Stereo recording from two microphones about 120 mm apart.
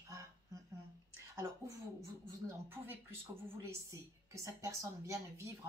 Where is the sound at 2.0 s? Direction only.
20° right (ahead or behind).